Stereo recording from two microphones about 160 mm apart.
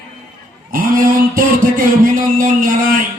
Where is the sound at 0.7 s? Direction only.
60° right (ahead or behind).